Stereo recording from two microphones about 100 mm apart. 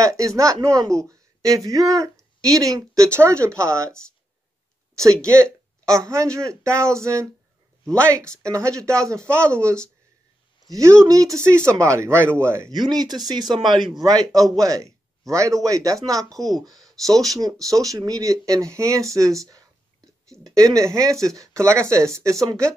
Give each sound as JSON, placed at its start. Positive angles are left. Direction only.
{"t": 0.0, "sound": "speech", "side_deg": -35}
{"t": 4.9, "sound": "speech", "side_deg": -30}
{"t": 8.4, "sound": "speech", "side_deg": -30}
{"t": 10.7, "sound": "speech", "side_deg": -30}
{"t": 12.7, "sound": "speech", "side_deg": -45}
{"t": 16.3, "sound": "speech", "side_deg": 5}
{"t": 17.4, "sound": "speech", "side_deg": -35}